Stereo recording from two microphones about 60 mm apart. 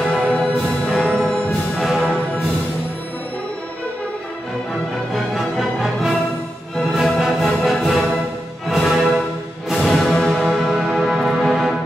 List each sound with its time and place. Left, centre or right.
0.0 s music: centre
5.1 s music: centre